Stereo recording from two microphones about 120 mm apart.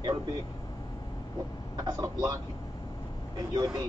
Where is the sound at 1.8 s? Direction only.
30° right (ahead or behind).